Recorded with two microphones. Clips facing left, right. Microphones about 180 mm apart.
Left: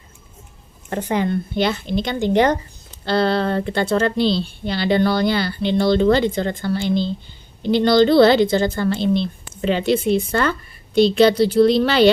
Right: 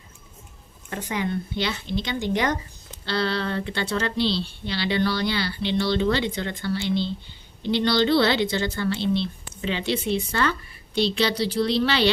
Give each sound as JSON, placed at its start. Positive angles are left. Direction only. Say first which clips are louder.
{"t": 0.9, "sound": "speech", "louder": "left 7 dB", "side_deg": 50}